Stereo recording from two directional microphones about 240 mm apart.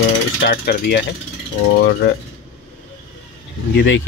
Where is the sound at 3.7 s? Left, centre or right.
Left.